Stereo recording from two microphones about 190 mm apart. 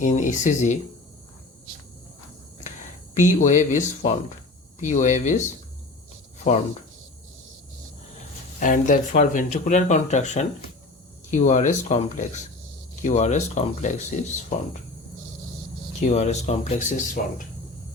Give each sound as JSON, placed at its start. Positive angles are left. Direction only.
{"t": 0.0, "sound": "speech", "side_deg": 40}
{"t": 3.2, "sound": "speech", "side_deg": 40}
{"t": 8.5, "sound": "speech", "side_deg": 45}
{"t": 16.0, "sound": "speech", "side_deg": 40}